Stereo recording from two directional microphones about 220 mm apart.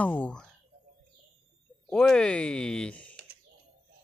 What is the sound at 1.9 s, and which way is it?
Speech, 5° left (ahead or behind).